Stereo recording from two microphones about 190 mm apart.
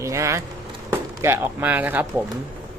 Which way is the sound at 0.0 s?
15° right (ahead or behind).